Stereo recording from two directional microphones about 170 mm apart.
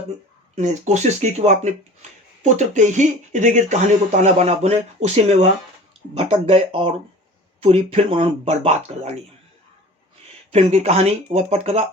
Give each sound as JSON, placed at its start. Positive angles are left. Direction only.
{"t": 0.5, "sound": "speech", "side_deg": -40}
{"t": 10.5, "sound": "speech", "side_deg": -35}